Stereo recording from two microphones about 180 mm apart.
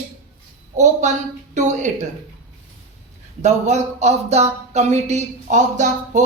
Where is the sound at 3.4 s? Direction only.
40° right (ahead or behind).